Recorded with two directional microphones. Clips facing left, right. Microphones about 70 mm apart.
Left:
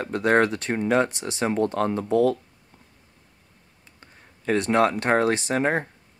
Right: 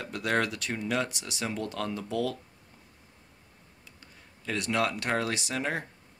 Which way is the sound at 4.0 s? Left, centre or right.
Left.